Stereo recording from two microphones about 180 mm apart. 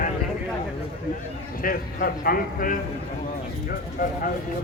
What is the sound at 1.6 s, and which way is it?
Speech, 55° left (ahead or behind).